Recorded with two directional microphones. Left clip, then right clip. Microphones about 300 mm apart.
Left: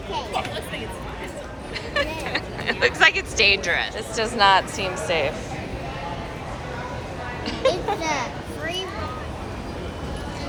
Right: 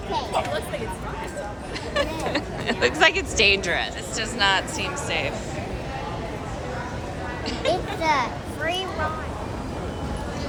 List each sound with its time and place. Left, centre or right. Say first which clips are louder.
1.9 s speech: even; centre
7.4 s a child's voice: left 3 dB; centre